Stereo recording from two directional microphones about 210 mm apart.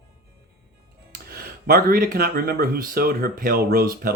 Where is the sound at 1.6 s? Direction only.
45° right (ahead or behind).